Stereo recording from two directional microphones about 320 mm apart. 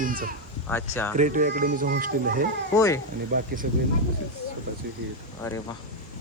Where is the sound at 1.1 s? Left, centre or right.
Right.